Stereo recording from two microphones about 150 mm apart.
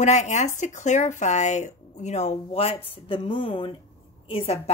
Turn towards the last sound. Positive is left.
turn(degrees=40)  # may be behind; listen again after turning